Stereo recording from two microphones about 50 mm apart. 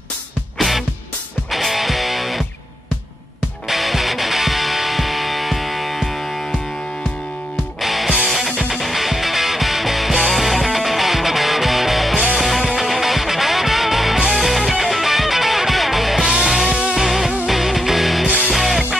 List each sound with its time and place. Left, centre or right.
0.6 s music: centre
3.6 s music: centre
7.8 s music: centre
18.2 s music: centre
18.5 s music: centre